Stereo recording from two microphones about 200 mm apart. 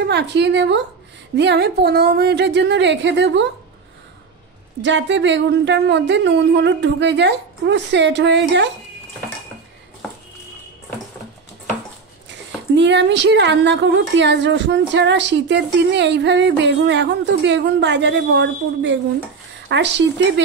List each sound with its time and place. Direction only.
0.0 s a woman's voice: 60° right (ahead or behind)
4.8 s a woman's voice: 65° right (ahead or behind)
10.0 s a sound: centre (ahead or behind)
12.7 s a woman's voice: 60° right (ahead or behind)